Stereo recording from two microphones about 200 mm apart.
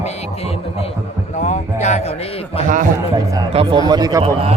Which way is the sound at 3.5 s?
30° right (ahead or behind).